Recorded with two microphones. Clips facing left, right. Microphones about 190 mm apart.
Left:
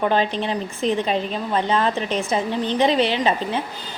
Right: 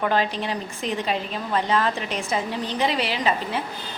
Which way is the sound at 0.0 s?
20° left (ahead or behind).